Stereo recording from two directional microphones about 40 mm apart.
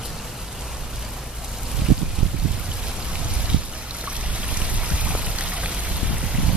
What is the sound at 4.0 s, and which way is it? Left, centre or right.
Stream, right.